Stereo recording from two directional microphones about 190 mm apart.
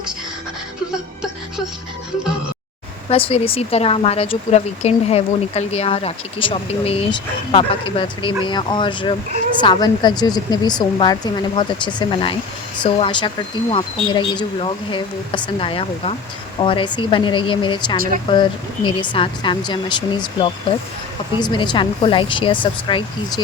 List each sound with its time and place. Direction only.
3.1 s speech: 30° left (ahead or behind)